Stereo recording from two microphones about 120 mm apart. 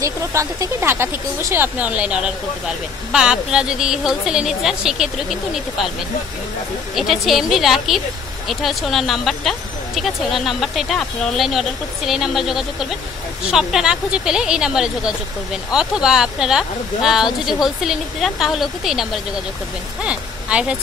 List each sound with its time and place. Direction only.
0.0 s speech: 25° right (ahead or behind); by 5.9 s 5° right (ahead or behind)
7.0 s speech: centre (ahead or behind)